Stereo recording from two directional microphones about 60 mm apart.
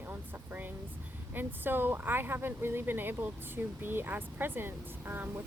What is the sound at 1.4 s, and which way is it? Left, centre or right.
Speech, right.